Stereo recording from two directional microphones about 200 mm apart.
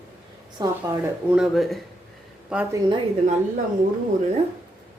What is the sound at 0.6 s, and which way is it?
Speech, 20° right (ahead or behind).